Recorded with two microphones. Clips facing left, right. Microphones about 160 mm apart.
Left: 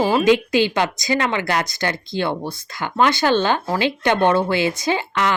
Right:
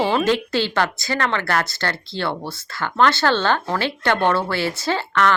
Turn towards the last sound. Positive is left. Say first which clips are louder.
# right 1 dB
turn(degrees=15)  # may be behind; listen again after turning